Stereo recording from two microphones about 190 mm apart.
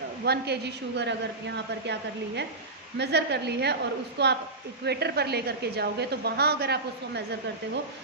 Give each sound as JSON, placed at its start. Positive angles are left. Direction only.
{"t": 0.3, "sound": "a woman's voice", "side_deg": -60}